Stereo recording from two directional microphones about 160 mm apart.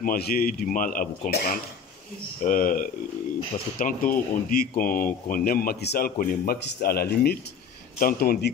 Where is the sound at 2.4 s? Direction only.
60° left (ahead or behind).